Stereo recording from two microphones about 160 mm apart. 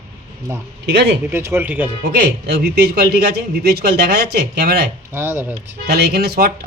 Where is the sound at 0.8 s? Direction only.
90° right.